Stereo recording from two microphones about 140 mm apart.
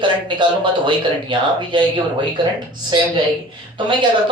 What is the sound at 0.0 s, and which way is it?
Speech, 35° right (ahead or behind).